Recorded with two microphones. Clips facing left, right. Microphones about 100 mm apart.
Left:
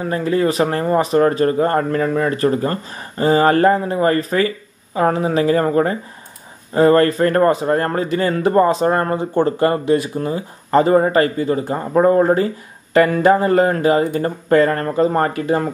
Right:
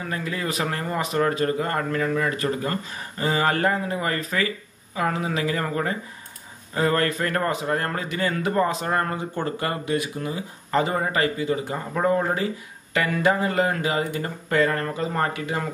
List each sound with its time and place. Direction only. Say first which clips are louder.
0.0 s a man's voice: left 11 dB; 35° left (ahead or behind)